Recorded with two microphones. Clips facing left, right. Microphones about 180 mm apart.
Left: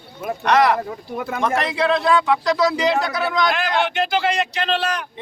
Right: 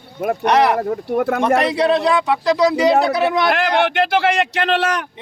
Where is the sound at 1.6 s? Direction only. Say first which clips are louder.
Right 4 dB; 35° right (ahead or behind).